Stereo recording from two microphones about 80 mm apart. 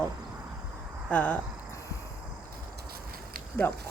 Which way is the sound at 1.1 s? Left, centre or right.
Centre.